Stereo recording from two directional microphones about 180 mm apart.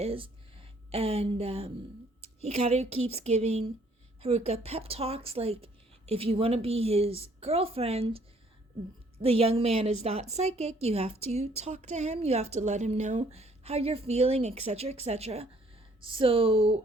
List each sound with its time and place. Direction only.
0.0 s a woman's voice: 30° right (ahead or behind)
9.2 s a woman's voice: 35° right (ahead or behind)